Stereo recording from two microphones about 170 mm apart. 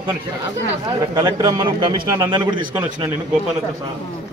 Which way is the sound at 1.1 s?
25° right (ahead or behind).